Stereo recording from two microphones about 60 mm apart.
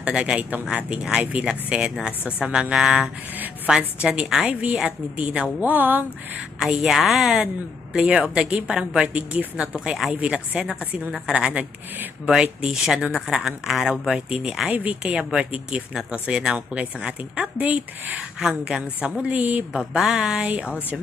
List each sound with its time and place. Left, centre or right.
0.0 s a woman's voice: centre
1.5 s a woman's voice: centre; by 6.4 s right
6.6 s a woman's voice: centre
14.3 s a woman's voice: centre
17.6 s speech: right
18.3 s a woman's voice: centre
19.9 s a woman's voice: centre